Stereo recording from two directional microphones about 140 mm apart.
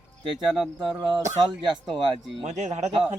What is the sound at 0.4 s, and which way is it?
Speech, centre (ahead or behind).